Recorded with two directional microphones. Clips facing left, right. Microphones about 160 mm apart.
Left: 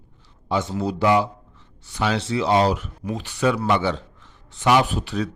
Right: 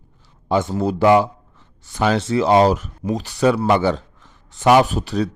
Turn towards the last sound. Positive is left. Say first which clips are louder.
# right 4 dB
turn(degrees=-35)  # may be behind; listen again after turning